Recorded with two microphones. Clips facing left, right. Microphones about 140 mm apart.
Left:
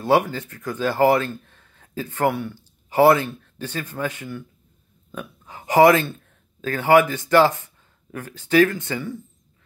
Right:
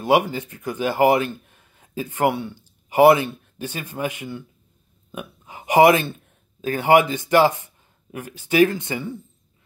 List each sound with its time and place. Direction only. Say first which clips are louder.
0.0 s speech: even; 15° right (ahead or behind)